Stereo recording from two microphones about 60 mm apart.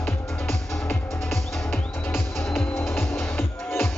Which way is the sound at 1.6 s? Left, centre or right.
Left.